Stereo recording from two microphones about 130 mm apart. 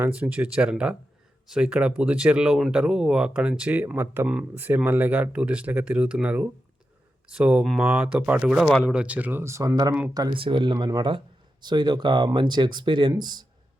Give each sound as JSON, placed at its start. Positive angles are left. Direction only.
{"t": 0.0, "sound": "speech", "side_deg": -10}